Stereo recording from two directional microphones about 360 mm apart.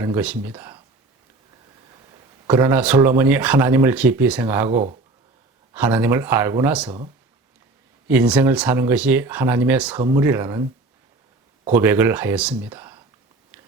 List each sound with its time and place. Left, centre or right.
0.0 s speech: centre
2.5 s speech: centre
4.7 s speech: centre
5.7 s speech: centre
8.0 s speech: centre
11.7 s speech: centre